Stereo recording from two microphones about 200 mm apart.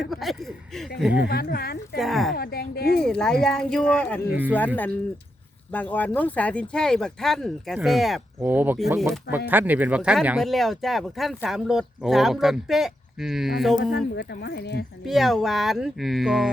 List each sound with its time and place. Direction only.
0.1 s speech: centre (ahead or behind)
1.3 s speech: 50° left (ahead or behind)
2.0 s speech: centre (ahead or behind)
2.3 s speech: 50° left (ahead or behind)
3.0 s speech: 5° left (ahead or behind)
13.9 s speech: 55° left (ahead or behind)
15.0 s speech: centre (ahead or behind)